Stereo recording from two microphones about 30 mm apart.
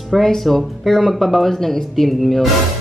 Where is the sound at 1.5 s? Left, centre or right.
Centre.